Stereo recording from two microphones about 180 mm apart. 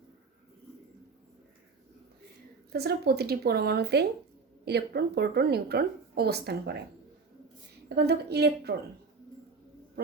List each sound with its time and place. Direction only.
2.7 s a woman's voice: 60° right (ahead or behind)
7.9 s a woman's voice: 65° right (ahead or behind)